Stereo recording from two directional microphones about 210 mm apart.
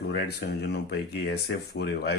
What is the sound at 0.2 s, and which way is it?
Speech, 50° left (ahead or behind).